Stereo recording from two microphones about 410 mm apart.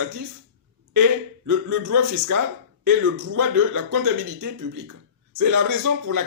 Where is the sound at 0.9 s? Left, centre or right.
Right.